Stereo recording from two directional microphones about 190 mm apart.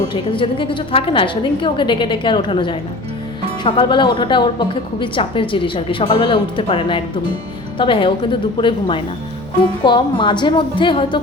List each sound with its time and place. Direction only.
0.1 s a woman's voice: 25° left (ahead or behind)